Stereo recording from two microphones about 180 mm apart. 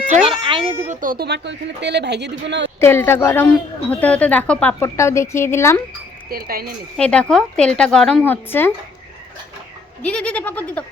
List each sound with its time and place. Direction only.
0.4 s a sound: 30° right (ahead or behind)
0.9 s speech: 50° right (ahead or behind); by 2.6 s 75° right (ahead or behind)
2.8 s speech: 10° left (ahead or behind)
6.3 s speech: 55° right (ahead or behind)
6.9 s speech: 5° left (ahead or behind)
10.0 s speech: 5° left (ahead or behind)